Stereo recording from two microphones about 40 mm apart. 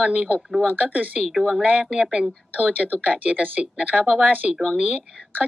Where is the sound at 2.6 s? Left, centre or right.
Right.